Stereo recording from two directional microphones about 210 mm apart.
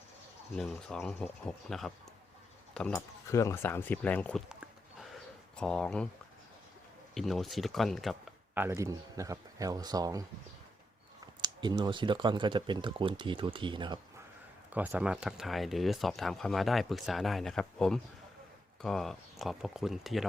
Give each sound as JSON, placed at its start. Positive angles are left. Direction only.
{"t": 0.5, "sound": "speech", "side_deg": 0}
{"t": 7.1, "sound": "speech", "side_deg": 0}
{"t": 11.3, "sound": "speech", "side_deg": -20}
{"t": 14.7, "sound": "speech", "side_deg": -5}